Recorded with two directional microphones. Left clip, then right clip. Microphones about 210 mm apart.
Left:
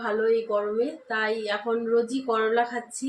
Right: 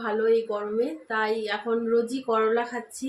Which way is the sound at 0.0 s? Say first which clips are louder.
Right 1 dB; 5° right (ahead or behind).